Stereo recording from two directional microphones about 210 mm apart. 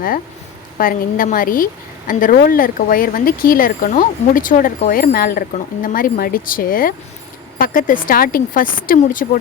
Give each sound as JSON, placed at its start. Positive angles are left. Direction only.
{"t": 0.8, "sound": "a woman's voice", "side_deg": 40}